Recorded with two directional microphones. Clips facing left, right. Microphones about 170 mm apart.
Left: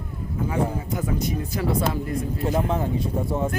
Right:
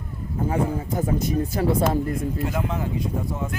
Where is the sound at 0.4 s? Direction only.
40° right (ahead or behind).